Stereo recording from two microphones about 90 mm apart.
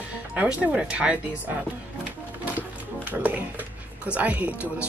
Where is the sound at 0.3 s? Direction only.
15° right (ahead or behind).